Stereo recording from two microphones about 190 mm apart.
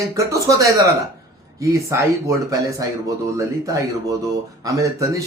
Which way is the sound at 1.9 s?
15° right (ahead or behind).